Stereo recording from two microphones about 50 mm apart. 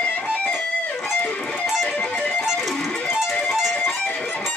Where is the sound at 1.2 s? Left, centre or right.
Left.